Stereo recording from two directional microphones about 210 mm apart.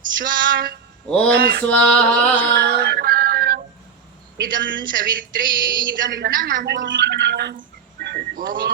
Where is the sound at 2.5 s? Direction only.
50° right (ahead or behind).